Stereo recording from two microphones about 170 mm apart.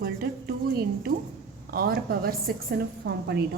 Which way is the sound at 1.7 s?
60° right (ahead or behind).